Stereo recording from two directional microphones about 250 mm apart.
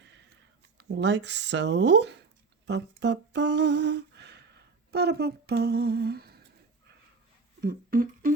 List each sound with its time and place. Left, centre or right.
0.8 s speech: right
2.6 s humming: right
7.6 s speech: right